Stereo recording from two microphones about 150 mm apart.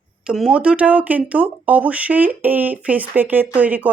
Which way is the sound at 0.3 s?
5° right (ahead or behind).